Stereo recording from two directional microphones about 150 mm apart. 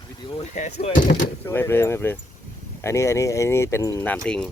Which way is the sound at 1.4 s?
15° left (ahead or behind).